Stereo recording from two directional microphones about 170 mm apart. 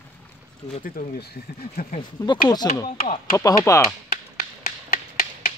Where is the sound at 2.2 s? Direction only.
20° left (ahead or behind).